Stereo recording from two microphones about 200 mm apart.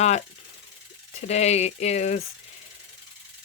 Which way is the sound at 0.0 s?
35° left (ahead or behind).